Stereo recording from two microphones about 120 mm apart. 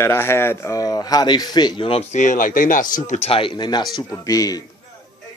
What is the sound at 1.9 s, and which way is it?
Speech, 65° left (ahead or behind).